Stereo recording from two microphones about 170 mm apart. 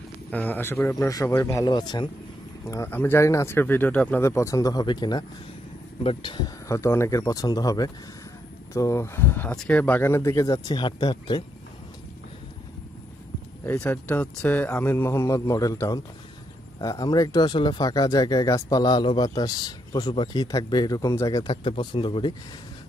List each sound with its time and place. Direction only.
0.3 s speech: 10° left (ahead or behind); by 11.4 s 25° left (ahead or behind)
13.7 s speech: 10° left (ahead or behind); by 22.3 s 30° left (ahead or behind)